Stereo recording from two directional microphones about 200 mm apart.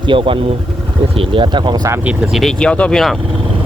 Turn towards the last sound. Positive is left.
turn(degrees=0)  # may be behind; listen again after turning